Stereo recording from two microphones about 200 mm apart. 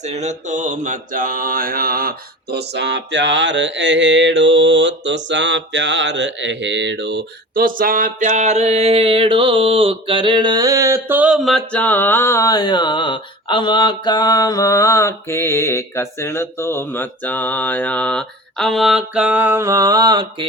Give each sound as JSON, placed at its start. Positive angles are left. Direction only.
{"t": 0.0, "sound": "mantra", "side_deg": -35}